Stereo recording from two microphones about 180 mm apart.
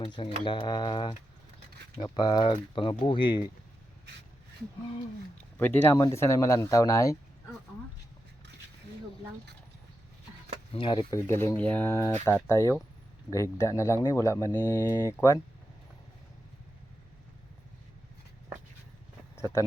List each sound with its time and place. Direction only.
0.0 s speech: 25° left (ahead or behind)
5.5 s speech: 10° left (ahead or behind)
10.8 s speech: 25° left (ahead or behind)
11.3 s speech: 15° left (ahead or behind)